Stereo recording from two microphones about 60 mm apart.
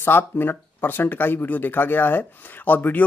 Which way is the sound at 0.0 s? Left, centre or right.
Left.